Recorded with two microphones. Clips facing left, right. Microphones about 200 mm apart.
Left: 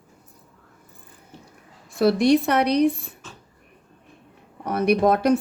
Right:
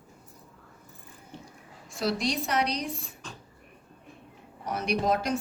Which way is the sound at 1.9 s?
60° left (ahead or behind).